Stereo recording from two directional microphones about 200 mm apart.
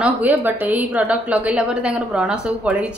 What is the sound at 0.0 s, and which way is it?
A woman's voice, 10° right (ahead or behind).